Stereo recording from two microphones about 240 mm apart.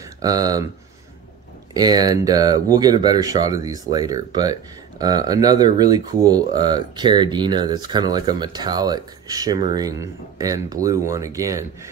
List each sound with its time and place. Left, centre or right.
0.2 s speech: centre
1.7 s speech: centre